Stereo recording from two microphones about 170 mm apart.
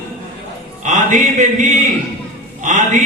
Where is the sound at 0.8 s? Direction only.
45° right (ahead or behind).